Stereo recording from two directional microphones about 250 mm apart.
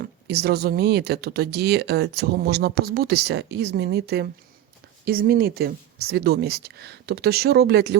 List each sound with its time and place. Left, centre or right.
0.0 s speech: right